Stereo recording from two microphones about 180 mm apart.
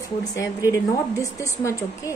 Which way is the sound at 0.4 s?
20° left (ahead or behind).